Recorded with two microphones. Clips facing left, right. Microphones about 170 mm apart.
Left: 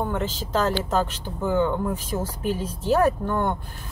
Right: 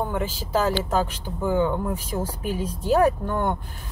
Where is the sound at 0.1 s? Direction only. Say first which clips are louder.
Right 1 dB; 10° right (ahead or behind).